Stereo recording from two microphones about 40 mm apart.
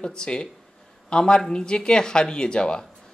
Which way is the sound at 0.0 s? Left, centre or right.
Left.